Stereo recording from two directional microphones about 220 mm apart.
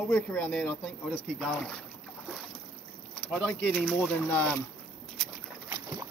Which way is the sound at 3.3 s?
Centre (ahead or behind).